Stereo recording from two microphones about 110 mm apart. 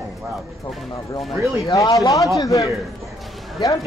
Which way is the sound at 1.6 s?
30° left (ahead or behind).